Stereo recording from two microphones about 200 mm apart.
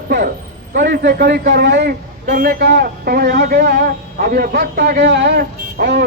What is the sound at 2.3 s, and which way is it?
A man's voice, 45° right (ahead or behind).